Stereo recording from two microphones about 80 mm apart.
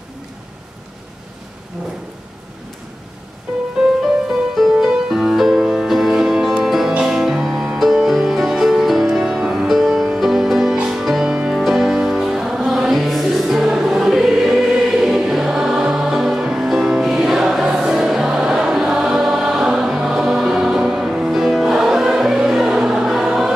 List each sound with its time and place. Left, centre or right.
3.8 s music: centre